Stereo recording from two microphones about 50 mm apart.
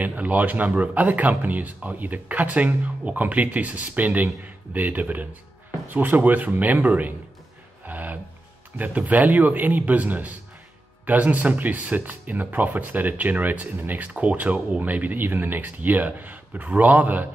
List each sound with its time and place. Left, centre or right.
0.0 s speech: right
7.8 s music: right
8.7 s speech: right